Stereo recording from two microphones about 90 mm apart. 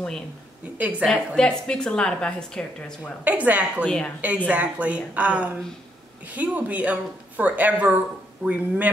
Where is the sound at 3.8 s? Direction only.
10° left (ahead or behind).